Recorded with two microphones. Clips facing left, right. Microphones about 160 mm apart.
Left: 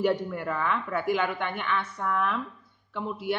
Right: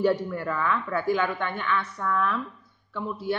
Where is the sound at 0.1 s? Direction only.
45° right (ahead or behind).